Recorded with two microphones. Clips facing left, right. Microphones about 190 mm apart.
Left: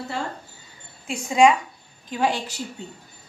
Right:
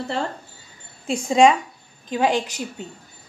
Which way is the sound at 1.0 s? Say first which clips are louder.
Right 2 dB; 30° right (ahead or behind).